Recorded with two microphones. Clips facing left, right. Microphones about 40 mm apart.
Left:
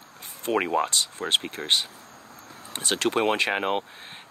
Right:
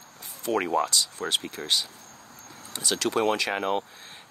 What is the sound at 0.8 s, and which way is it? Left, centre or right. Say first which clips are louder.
Speech: left 1 dB; left.